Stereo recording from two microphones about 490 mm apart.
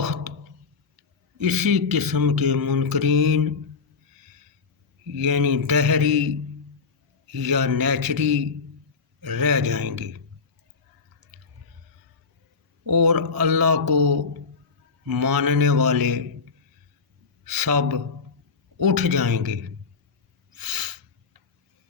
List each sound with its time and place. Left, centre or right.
0.0 s a sound: right
1.4 s speech: right
5.1 s speech: right
12.8 s speech: right
17.4 s speech: right
20.6 s a sound: right